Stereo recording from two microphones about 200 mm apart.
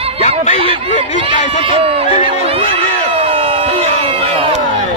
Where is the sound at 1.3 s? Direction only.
35° left (ahead or behind).